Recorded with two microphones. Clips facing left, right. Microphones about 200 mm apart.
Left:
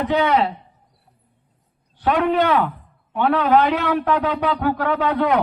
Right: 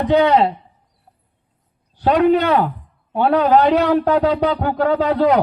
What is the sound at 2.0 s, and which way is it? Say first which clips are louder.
A man's voice: right 4 dB; 35° right (ahead or behind).